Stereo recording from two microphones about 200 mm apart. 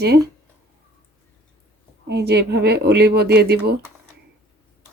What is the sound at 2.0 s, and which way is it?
Speech, 55° right (ahead or behind).